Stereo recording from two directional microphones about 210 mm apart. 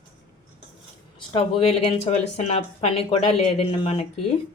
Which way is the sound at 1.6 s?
25° left (ahead or behind).